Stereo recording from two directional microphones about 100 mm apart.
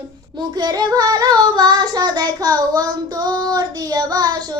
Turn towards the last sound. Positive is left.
turn(degrees=-40)  # may be behind; listen again after turning